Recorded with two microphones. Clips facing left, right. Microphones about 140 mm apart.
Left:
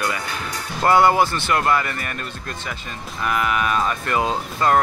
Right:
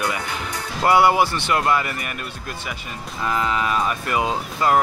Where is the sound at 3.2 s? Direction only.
25° right (ahead or behind).